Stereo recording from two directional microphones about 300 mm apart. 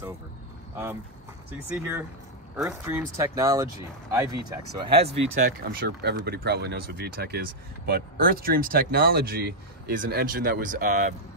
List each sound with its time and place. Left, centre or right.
1.7 s speech: centre
5.4 s speech: right